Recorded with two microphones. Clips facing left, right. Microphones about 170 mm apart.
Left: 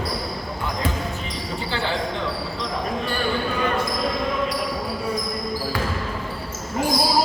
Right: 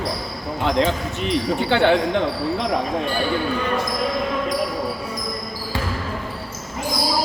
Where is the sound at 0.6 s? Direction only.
75° right (ahead or behind).